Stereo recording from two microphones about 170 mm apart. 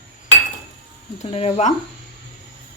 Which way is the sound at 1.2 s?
35° left (ahead or behind).